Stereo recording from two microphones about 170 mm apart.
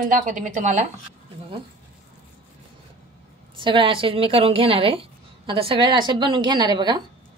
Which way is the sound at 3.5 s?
30° right (ahead or behind).